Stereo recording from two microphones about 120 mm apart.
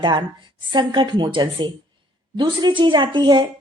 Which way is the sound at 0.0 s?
40° right (ahead or behind).